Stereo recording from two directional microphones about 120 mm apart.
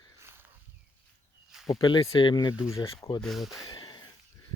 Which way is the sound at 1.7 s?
40° left (ahead or behind).